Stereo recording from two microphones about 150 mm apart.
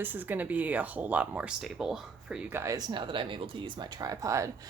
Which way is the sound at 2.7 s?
30° right (ahead or behind).